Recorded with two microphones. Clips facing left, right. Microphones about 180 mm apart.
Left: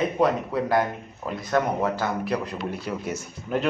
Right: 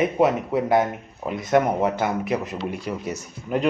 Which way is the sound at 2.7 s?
5° left (ahead or behind).